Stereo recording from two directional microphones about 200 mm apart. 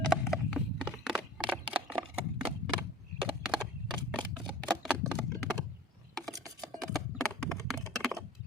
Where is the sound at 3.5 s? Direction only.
5° right (ahead or behind).